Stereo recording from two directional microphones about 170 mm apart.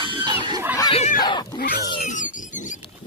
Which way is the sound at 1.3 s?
25° left (ahead or behind).